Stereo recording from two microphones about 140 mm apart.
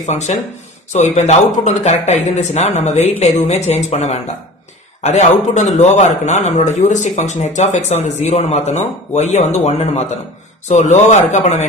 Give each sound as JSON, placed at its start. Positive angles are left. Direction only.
{"t": 0.0, "sound": "speech", "side_deg": 55}